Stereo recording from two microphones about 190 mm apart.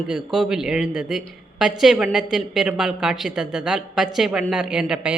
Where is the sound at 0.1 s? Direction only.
5° right (ahead or behind).